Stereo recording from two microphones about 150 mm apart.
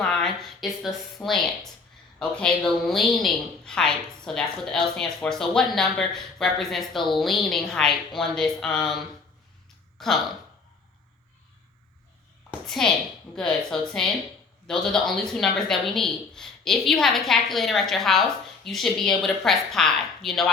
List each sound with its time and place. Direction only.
0.0 s a woman's voice: 5° left (ahead or behind)
10.0 s a woman's voice: centre (ahead or behind)
12.5 s a sound: 5° left (ahead or behind)
13.3 s a woman's voice: 5° left (ahead or behind)